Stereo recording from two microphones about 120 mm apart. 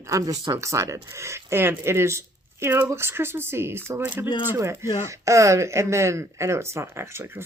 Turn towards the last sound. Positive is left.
turn(degrees=-20)  # may be behind; listen again after turning